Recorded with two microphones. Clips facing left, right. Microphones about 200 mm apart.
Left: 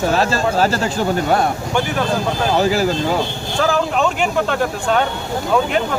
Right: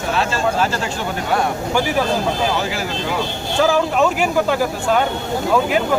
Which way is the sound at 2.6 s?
40° left (ahead or behind).